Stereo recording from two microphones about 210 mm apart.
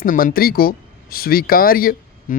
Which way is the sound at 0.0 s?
40° left (ahead or behind).